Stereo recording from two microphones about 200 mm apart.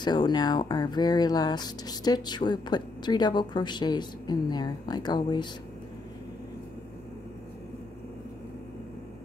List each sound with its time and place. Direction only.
0.0 s speech: 20° left (ahead or behind)